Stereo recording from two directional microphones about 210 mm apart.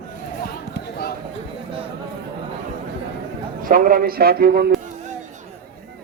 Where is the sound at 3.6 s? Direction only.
40° right (ahead or behind).